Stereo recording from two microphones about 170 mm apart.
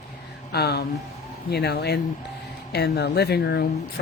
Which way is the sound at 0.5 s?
75° left (ahead or behind).